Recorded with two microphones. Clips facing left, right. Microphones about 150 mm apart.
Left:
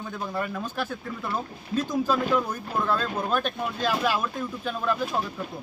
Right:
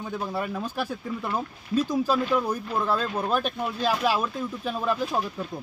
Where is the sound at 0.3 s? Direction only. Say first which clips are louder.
Right 1 dB; 10° right (ahead or behind).